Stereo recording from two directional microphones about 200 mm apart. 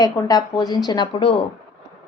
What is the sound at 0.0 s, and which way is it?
Speech, 20° left (ahead or behind).